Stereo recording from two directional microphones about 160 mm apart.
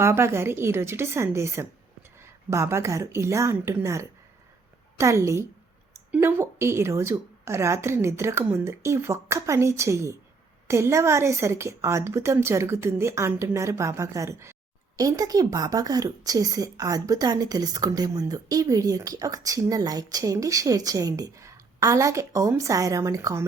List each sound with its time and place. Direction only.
0.0 s a woman's voice: 15° right (ahead or behind)